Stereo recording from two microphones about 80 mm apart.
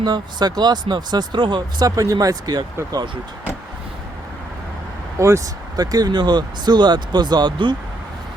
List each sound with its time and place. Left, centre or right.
0.0 s speech: right
2.0 s speech: right
5.2 s speech: right
5.7 s speech: right